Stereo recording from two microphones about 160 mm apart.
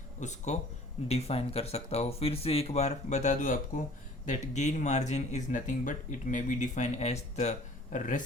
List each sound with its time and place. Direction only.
0.2 s speech: 45° left (ahead or behind)